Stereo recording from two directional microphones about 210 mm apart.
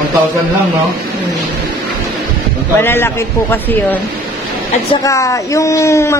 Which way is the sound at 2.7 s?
10° left (ahead or behind).